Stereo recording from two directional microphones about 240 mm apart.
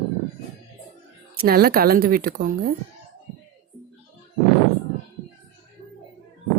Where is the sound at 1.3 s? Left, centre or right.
Right.